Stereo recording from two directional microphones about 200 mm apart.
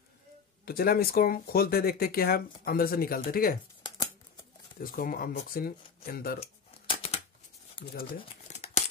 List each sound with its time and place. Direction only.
0.7 s speech: 50° left (ahead or behind)
4.7 s speech: 45° left (ahead or behind)
6.4 s a sound: 30° left (ahead or behind)
7.9 s speech: 45° left (ahead or behind)
8.2 s crumpling: 35° left (ahead or behind)